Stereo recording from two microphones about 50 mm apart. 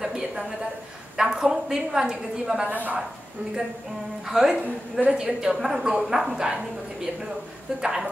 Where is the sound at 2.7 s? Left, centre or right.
Right.